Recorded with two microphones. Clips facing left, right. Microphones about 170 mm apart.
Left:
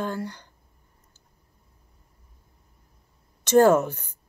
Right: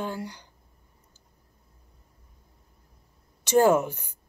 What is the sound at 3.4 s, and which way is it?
Speech, 10° right (ahead or behind).